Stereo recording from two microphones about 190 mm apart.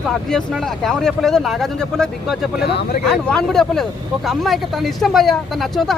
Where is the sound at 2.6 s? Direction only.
60° left (ahead or behind).